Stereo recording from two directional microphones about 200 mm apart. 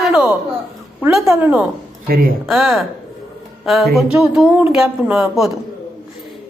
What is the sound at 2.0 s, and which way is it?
Speech, 50° right (ahead or behind).